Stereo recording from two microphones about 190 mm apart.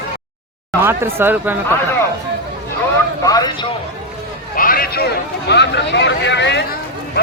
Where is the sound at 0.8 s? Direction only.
10° right (ahead or behind).